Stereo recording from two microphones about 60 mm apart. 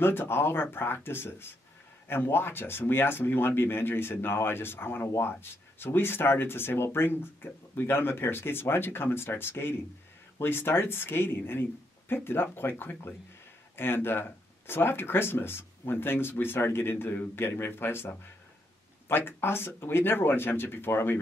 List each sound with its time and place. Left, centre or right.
0.0 s speech: left